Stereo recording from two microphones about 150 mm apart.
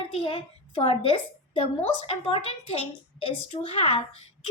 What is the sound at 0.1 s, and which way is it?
A woman's voice, 35° left (ahead or behind).